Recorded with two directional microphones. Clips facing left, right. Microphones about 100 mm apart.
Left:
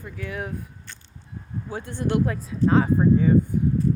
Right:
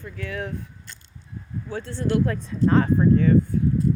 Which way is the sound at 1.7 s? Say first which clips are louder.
Right 1 dB; 15° left (ahead or behind).